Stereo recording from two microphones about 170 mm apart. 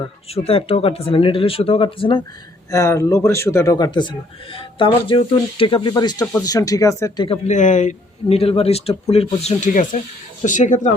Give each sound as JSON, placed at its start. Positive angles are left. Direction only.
{"t": 0.0, "sound": "a man's voice", "side_deg": 35}
{"t": 2.6, "sound": "speech", "side_deg": 20}
{"t": 7.3, "sound": "a man's voice", "side_deg": 45}